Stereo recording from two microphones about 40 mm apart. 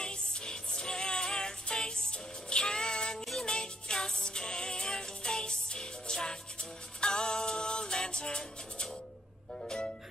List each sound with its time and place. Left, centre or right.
0.0 s music: left